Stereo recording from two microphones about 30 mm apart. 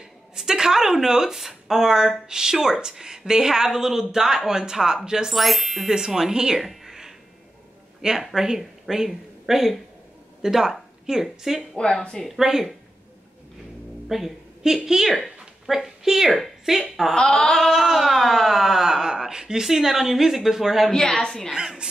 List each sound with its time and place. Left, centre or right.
0.4 s a woman's voice: right
5.3 s speech: centre
5.9 s speech: right
6.6 s a sound: centre
8.2 s a woman's voice: centre
14.0 s a woman's voice: centre
17.1 s a sound: left
17.6 s a woman's voice: centre
18.9 s a woman's voice: centre
20.9 s a woman's voice: left